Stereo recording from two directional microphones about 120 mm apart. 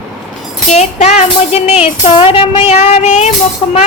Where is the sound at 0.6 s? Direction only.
70° left (ahead or behind).